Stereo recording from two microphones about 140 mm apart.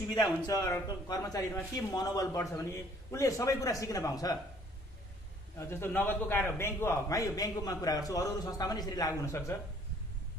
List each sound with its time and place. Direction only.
0.4 s a man's voice: 25° left (ahead or behind)
5.6 s a man's voice: 15° left (ahead or behind)